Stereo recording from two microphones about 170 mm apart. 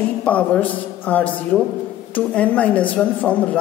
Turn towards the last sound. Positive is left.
turn(degrees=10)  # may be behind; listen again after turning